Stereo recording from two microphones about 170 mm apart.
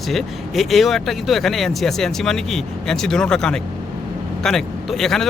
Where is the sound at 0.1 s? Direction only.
Centre (ahead or behind).